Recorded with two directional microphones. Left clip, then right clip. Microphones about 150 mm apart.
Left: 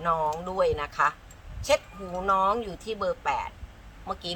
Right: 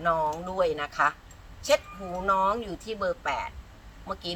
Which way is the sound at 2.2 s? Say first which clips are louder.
Left 1 dB; 20° left (ahead or behind).